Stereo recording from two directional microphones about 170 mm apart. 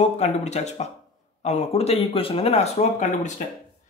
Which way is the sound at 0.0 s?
40° left (ahead or behind).